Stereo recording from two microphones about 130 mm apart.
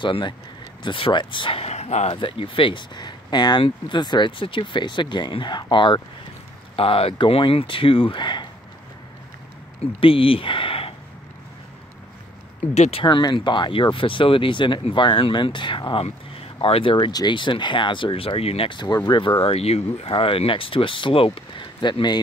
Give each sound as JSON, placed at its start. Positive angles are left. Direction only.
{"t": 0.0, "sound": "speech", "side_deg": 40}
{"t": 2.1, "sound": "speech", "side_deg": 40}
{"t": 9.9, "sound": "speech", "side_deg": 45}
{"t": 12.7, "sound": "speech", "side_deg": 55}
{"t": 13.0, "sound": "speech", "side_deg": 35}